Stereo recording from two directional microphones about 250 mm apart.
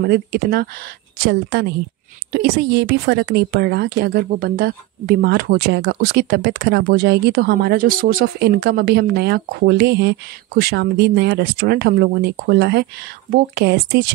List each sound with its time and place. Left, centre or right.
0.0 s a woman's voice: right